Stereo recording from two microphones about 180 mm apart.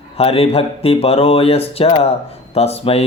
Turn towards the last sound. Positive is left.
turn(degrees=35)  # may be behind; listen again after turning